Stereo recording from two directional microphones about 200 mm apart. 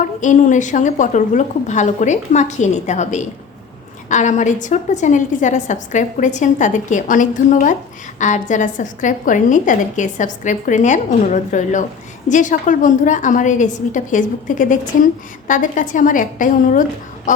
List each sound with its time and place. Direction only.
0.2 s a woman's voice: 40° left (ahead or behind)